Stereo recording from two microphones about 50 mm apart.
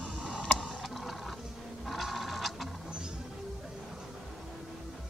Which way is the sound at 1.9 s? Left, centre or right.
Centre.